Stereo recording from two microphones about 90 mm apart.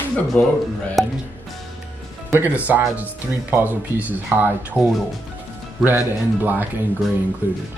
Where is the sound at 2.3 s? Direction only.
20° right (ahead or behind).